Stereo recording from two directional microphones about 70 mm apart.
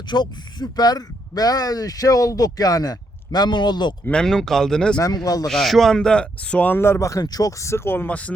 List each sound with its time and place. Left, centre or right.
0.1 s speech: left
4.1 s speech: centre
4.9 s speech: left
5.5 s speech: centre
6.7 s speech: left
7.1 s speech: left
7.6 s speech: left